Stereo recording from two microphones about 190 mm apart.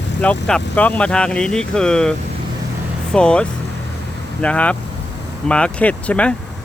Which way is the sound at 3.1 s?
5° left (ahead or behind).